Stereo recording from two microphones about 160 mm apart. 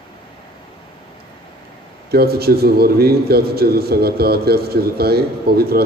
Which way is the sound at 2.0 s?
75° right (ahead or behind).